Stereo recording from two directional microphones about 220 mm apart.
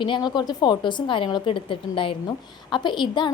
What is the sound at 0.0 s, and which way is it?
A woman's voice, 20° left (ahead or behind).